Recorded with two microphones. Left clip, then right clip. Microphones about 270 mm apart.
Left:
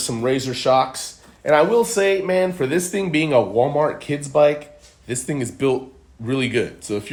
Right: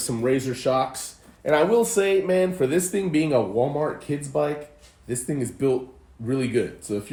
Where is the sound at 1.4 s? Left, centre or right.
Left.